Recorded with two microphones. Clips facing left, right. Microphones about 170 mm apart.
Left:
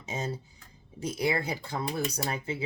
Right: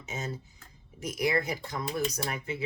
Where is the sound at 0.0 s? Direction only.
30° left (ahead or behind).